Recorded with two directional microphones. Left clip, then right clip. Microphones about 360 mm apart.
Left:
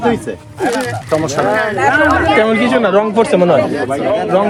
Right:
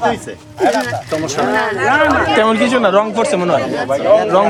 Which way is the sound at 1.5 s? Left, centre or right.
Centre.